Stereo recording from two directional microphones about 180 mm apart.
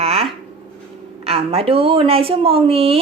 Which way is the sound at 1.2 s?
35° right (ahead or behind).